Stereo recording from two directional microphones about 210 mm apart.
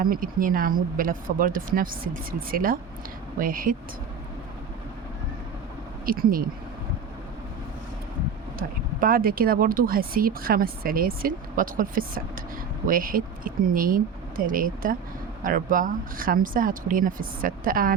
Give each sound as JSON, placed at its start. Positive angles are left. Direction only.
{"t": 0.0, "sound": "speech", "side_deg": -40}
{"t": 6.1, "sound": "speech", "side_deg": -45}
{"t": 8.5, "sound": "speech", "side_deg": -45}